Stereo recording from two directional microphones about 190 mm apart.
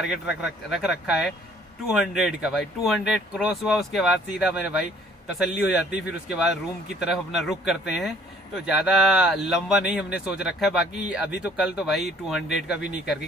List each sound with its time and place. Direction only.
0.0 s speech: centre (ahead or behind)